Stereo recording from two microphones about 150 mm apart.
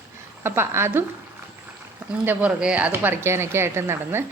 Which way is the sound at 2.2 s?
10° right (ahead or behind).